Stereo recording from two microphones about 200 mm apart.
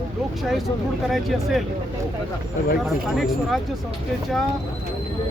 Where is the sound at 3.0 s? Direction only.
Centre (ahead or behind).